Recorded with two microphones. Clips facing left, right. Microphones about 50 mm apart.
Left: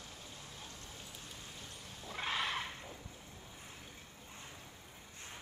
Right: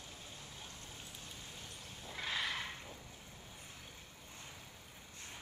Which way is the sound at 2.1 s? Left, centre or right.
Left.